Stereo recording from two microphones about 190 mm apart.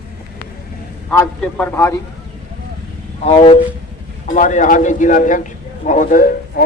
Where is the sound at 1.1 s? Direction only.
10° left (ahead or behind).